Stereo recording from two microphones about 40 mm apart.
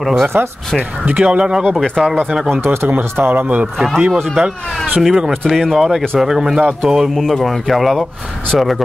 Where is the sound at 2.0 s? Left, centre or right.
Centre.